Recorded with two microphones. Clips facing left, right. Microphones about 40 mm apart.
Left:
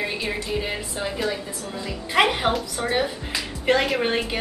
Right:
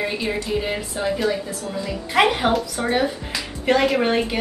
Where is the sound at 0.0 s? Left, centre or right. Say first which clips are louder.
Right 3 dB; centre.